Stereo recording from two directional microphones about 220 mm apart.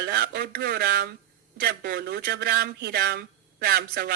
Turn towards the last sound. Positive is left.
turn(degrees=-45)  # may be behind; listen again after turning